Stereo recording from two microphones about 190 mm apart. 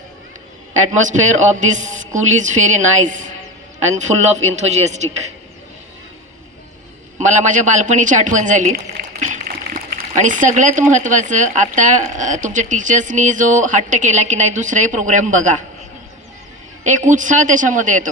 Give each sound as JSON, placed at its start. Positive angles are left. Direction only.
{"t": 0.9, "sound": "speech", "side_deg": -40}
{"t": 7.2, "sound": "speech", "side_deg": -40}
{"t": 16.8, "sound": "speech", "side_deg": -40}